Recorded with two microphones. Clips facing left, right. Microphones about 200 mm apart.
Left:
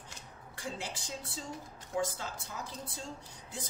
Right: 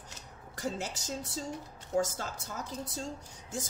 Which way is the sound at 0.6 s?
45° right (ahead or behind).